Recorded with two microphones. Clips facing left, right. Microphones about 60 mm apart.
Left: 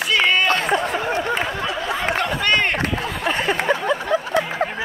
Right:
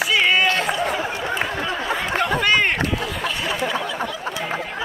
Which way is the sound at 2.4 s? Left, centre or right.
Centre.